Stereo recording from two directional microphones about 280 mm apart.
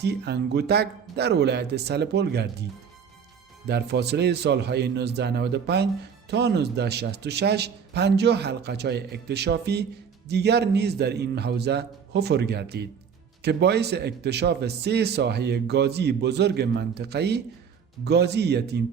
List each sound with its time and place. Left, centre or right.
0.0 s a man's voice: right
3.7 s a man's voice: right